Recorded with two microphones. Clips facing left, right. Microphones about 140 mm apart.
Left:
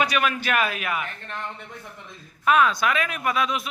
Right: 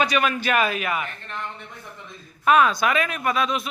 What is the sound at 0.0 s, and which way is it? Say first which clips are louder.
Speech: right 2 dB; 5° left (ahead or behind).